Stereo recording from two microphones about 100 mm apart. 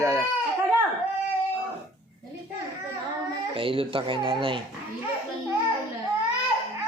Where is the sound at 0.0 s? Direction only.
30° right (ahead or behind).